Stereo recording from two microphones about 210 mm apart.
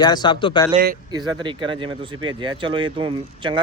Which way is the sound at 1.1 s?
20° right (ahead or behind).